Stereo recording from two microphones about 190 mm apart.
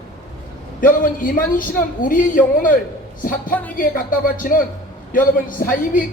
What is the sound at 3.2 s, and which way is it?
A man's voice, 45° left (ahead or behind).